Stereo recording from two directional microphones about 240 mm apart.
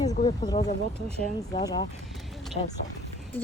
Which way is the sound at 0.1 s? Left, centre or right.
Left.